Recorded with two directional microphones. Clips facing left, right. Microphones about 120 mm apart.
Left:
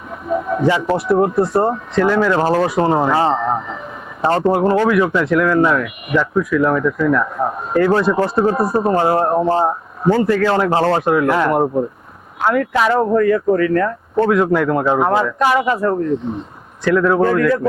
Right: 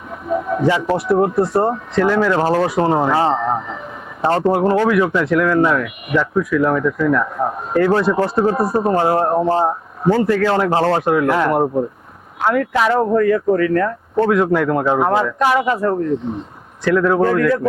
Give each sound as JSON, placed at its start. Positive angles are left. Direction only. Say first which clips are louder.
{"t": 0.3, "sound": "speech", "louder": "even", "side_deg": 30}
{"t": 12.5, "sound": "speech", "louder": "left 1 dB", "side_deg": 25}